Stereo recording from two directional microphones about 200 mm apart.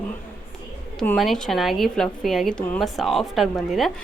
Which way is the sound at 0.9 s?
Centre (ahead or behind).